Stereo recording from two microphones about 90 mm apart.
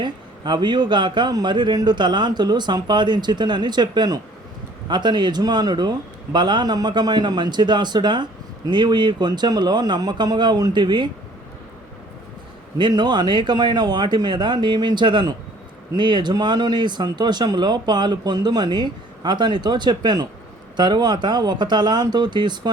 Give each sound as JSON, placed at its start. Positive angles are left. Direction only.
{"t": 0.0, "sound": "a man's voice", "side_deg": -55}
{"t": 12.8, "sound": "a man's voice", "side_deg": -55}